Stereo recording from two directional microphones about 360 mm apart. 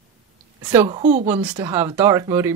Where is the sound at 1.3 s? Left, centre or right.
Centre.